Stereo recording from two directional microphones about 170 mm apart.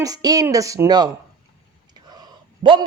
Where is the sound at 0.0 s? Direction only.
20° right (ahead or behind).